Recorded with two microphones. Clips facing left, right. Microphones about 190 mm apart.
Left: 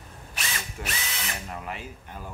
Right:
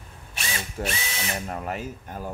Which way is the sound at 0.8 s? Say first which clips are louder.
Right 7 dB; 40° right (ahead or behind).